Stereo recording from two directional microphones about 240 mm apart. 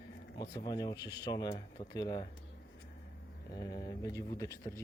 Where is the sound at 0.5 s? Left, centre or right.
Centre.